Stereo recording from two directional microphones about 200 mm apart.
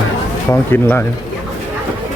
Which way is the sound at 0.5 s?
10° left (ahead or behind).